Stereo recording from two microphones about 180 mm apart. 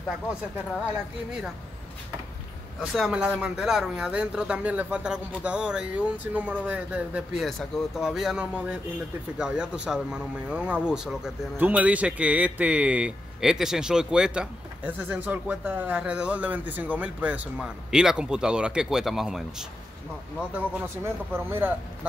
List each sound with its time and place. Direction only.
2.9 s speech: centre (ahead or behind)
20.5 s speech: 10° right (ahead or behind)